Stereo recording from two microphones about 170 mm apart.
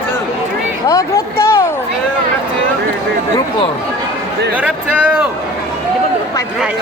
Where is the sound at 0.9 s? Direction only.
20° left (ahead or behind).